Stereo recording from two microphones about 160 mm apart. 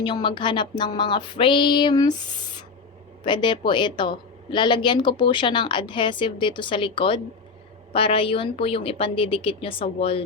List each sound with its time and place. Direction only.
0.0 s speech: 30° left (ahead or behind)
3.2 s a woman's voice: 30° left (ahead or behind)